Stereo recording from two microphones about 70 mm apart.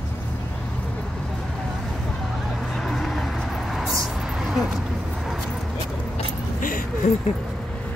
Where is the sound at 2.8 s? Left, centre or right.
Centre.